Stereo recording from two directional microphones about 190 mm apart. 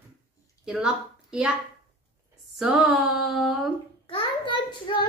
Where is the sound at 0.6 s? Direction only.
5° right (ahead or behind).